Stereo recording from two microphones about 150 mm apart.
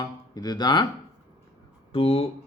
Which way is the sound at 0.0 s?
25° left (ahead or behind).